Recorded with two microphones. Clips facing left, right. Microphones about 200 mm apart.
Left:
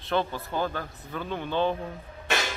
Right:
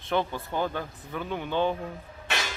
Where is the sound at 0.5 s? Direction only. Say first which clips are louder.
Even; 15° right (ahead or behind).